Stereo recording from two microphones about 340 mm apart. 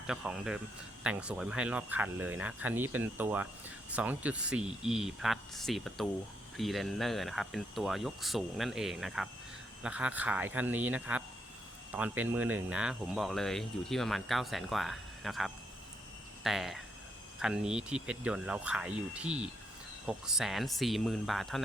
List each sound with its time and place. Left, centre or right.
0.1 s speech: centre